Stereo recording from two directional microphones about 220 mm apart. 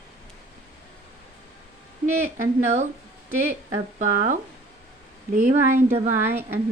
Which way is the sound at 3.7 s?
35° right (ahead or behind).